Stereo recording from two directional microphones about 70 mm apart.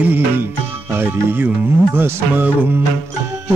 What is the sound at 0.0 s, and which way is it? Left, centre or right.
Music, right.